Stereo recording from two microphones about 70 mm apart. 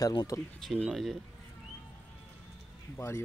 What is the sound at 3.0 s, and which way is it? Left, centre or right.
Speech, left.